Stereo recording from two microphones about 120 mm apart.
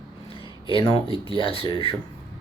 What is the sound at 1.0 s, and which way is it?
Speech, 50° left (ahead or behind).